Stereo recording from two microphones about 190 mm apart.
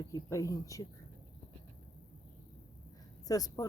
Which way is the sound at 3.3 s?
20° left (ahead or behind).